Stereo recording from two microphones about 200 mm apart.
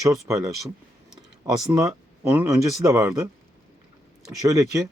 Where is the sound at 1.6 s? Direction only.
15° right (ahead or behind).